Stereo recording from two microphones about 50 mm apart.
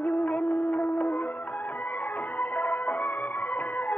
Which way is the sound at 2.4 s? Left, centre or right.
Left.